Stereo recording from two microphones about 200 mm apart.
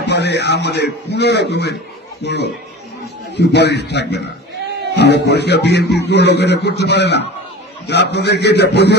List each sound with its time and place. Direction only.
0.0 s a man's voice: 55° left (ahead or behind)